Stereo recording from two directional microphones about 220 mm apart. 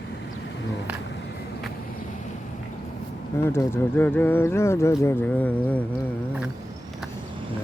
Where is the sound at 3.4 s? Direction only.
10° left (ahead or behind).